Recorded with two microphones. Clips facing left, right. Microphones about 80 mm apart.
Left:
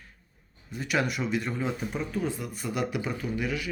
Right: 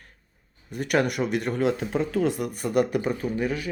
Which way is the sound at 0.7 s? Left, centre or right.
Right.